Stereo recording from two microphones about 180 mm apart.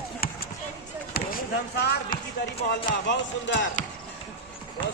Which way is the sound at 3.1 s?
90° left.